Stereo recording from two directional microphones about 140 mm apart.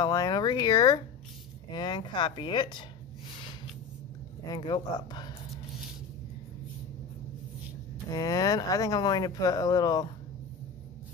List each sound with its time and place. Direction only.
0.0 s speech: 30° left (ahead or behind)
4.5 s speech: 30° left (ahead or behind)
8.1 s speech: 25° left (ahead or behind)